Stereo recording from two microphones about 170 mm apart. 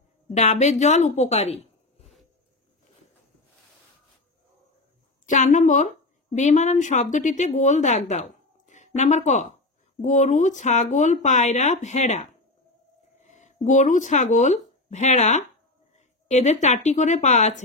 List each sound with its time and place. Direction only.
0.3 s speech: 40° left (ahead or behind)
5.2 s a woman's voice: 45° left (ahead or behind)
8.6 s a sound: 45° left (ahead or behind)
10.0 s speech: 45° left (ahead or behind)